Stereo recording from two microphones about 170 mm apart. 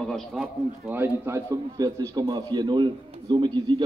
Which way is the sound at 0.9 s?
15° right (ahead or behind).